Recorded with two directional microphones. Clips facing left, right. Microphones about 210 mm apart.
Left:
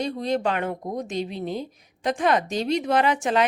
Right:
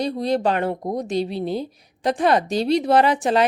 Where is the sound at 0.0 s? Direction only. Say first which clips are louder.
Right 4 dB; 35° right (ahead or behind).